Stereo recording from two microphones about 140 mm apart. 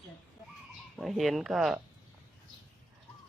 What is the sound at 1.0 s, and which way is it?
Speech, centre (ahead or behind).